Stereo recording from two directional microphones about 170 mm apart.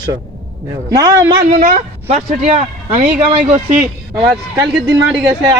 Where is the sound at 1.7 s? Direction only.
40° right (ahead or behind).